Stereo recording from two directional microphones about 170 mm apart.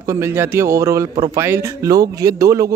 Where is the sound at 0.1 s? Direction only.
15° right (ahead or behind).